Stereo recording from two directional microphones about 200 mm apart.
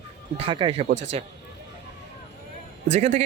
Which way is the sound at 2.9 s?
35° right (ahead or behind).